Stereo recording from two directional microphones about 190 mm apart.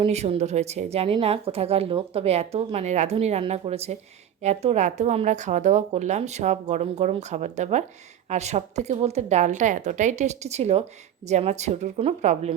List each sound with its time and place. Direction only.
0.0 s a woman's voice: 35° right (ahead or behind)